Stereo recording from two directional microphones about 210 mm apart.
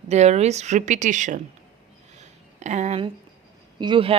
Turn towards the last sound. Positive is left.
turn(degrees=-25)  # may be behind; listen again after turning